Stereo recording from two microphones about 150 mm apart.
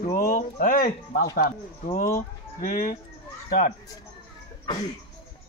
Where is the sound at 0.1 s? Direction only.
70° left (ahead or behind); by 1.5 s 85° left.